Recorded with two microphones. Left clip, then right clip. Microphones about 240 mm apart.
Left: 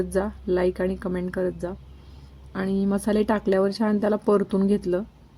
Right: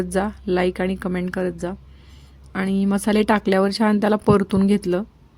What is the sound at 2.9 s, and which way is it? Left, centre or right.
Speech, right.